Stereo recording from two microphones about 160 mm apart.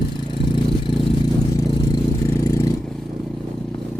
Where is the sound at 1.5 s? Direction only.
20° left (ahead or behind).